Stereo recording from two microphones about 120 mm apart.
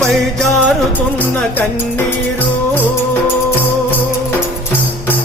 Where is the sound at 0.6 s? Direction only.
15° left (ahead or behind).